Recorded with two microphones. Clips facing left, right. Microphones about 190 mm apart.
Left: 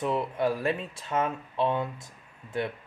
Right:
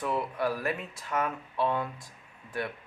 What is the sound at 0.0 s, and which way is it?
Speech, 25° left (ahead or behind).